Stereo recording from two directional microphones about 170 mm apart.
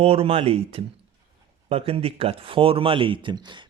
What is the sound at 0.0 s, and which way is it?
Speech, 35° right (ahead or behind).